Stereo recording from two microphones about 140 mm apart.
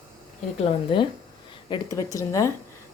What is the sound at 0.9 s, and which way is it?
Speech, 40° left (ahead or behind).